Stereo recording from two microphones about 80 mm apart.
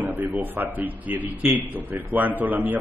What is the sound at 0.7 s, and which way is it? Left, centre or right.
A man's voice, right.